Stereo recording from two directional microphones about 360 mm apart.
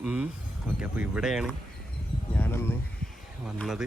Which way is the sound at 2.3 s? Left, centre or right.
Centre.